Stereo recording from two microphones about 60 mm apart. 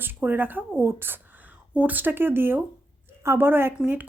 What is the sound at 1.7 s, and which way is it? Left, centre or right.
A woman's voice, right.